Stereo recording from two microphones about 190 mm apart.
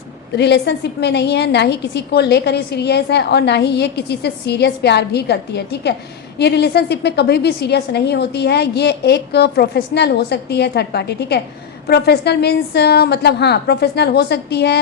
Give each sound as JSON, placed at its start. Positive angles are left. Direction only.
{"t": 0.3, "sound": "a woman's voice", "side_deg": 65}